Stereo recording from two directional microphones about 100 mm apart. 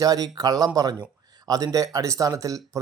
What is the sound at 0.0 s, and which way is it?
Speech, 40° right (ahead or behind).